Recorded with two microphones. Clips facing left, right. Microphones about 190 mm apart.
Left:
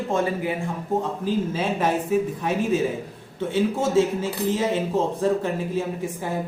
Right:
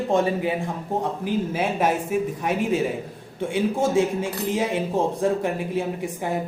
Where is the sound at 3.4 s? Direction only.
10° right (ahead or behind).